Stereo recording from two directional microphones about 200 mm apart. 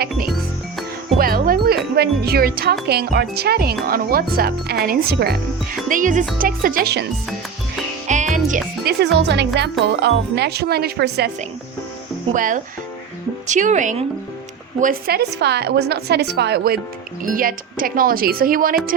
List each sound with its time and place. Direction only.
1.2 s music: 45° right (ahead or behind)
2.8 s speech: 50° right (ahead or behind)
5.9 s speech: 40° right (ahead or behind)
8.0 s music: 35° right (ahead or behind)
8.8 s a woman's voice: 55° right (ahead or behind)
12.3 s a woman's voice: 40° right (ahead or behind)